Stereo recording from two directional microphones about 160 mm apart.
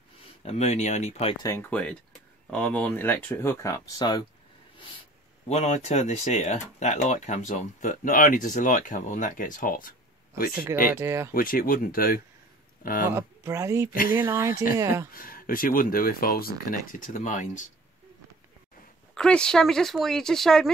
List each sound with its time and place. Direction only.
0.5 s speech: 45° left (ahead or behind)
1.4 s speech: 20° left (ahead or behind)
1.7 s speech: 10° left (ahead or behind); by 4.3 s 30° left (ahead or behind)
5.5 s speech: 40° left (ahead or behind); by 10.5 s 60° left (ahead or behind)
10.5 s speech: 15° right (ahead or behind)
11.3 s speech: 60° left (ahead or behind)
13.1 s speech: 15° right (ahead or behind)
15.1 s speech: 65° left (ahead or behind)
19.1 s speech: 5° left (ahead or behind)